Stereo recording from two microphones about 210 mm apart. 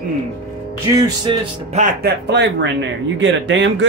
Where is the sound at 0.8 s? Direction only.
20° right (ahead or behind).